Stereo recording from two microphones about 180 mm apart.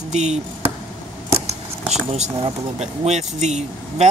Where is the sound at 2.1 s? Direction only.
30° right (ahead or behind).